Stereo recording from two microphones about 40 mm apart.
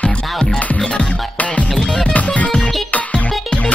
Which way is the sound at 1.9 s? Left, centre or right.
Left.